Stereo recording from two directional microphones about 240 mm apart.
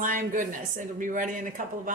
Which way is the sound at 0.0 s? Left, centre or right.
Right.